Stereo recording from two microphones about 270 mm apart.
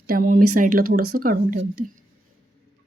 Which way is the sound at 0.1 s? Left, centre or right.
Right.